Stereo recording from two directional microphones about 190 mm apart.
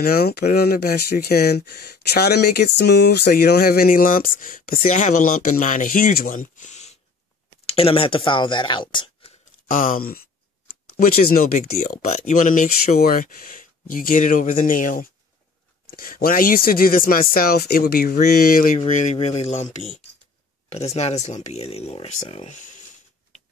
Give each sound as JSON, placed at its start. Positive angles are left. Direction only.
{"t": 0.0, "sound": "speech", "side_deg": 55}
{"t": 9.7, "sound": "speech", "side_deg": 50}
{"t": 18.8, "sound": "speech", "side_deg": 35}